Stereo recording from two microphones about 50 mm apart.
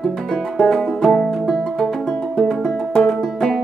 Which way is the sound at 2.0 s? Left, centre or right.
Centre.